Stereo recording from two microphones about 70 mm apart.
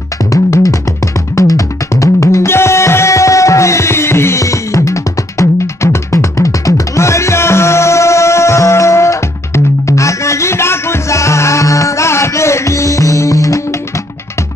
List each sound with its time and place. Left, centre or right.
0.3 s music: left